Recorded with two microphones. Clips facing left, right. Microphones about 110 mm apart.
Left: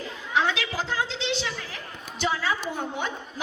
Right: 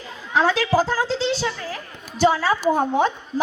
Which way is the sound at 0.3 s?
40° right (ahead or behind).